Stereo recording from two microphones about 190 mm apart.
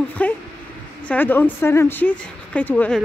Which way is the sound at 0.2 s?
10° left (ahead or behind).